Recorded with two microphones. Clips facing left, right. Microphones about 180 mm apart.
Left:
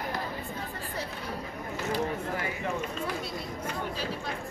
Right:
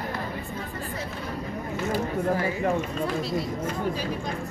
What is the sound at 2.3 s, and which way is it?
Speech, 35° right (ahead or behind).